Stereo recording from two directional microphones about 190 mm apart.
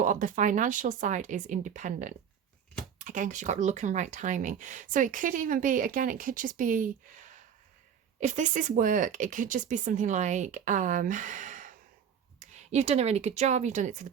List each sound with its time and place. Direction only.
0.0 s speech: 45° right (ahead or behind)